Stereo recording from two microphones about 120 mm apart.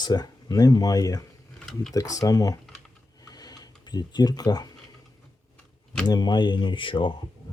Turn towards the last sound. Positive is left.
turn(degrees=45)  # may be behind; listen again after turning